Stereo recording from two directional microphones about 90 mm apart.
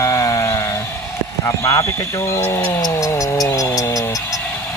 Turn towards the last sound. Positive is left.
turn(degrees=40)  # may be behind; listen again after turning